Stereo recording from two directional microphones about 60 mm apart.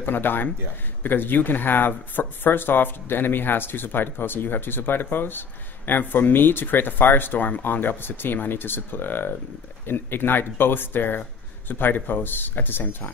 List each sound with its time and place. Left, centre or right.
0.0 s speech: left